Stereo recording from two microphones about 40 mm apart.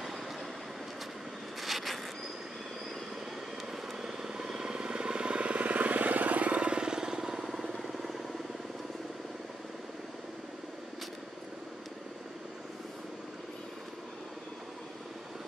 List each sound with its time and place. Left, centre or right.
1.6 s vehicle: centre
4.0 s vehicle: centre